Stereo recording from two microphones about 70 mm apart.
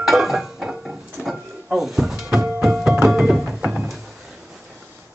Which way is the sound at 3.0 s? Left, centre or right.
Centre.